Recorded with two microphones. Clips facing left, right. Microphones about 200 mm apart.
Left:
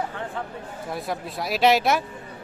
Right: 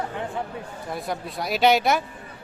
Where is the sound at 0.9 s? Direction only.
Centre (ahead or behind).